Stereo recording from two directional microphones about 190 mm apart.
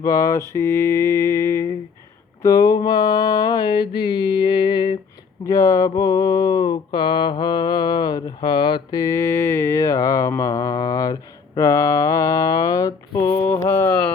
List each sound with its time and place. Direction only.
0.0 s mantra: 20° left (ahead or behind)